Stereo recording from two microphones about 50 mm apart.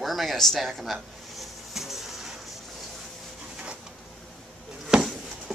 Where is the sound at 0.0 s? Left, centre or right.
Centre.